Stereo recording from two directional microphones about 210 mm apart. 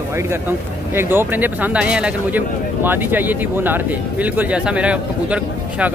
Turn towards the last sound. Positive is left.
turn(degrees=-5)  # may be behind; listen again after turning